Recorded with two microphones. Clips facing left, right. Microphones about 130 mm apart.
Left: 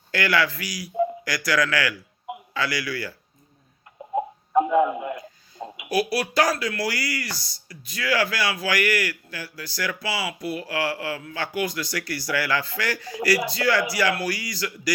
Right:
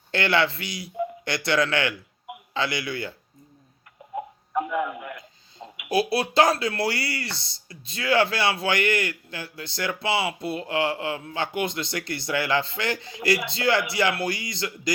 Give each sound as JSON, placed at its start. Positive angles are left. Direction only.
{"t": 0.1, "sound": "speech", "side_deg": -25}
{"t": 4.1, "sound": "a sound", "side_deg": 25}
{"t": 5.9, "sound": "speech", "side_deg": -25}